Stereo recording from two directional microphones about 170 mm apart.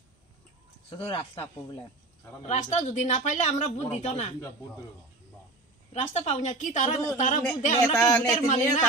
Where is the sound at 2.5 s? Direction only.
40° left (ahead or behind).